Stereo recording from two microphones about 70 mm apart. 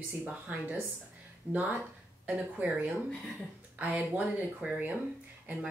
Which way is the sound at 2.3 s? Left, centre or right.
Right.